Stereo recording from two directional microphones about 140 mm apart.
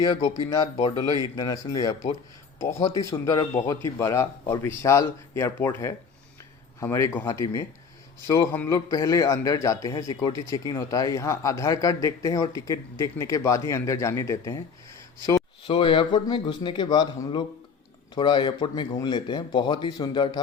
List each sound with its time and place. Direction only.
0.0 s a man's voice: 25° left (ahead or behind)
8.7 s a man's voice: 25° left (ahead or behind)
15.6 s speech: 40° left (ahead or behind)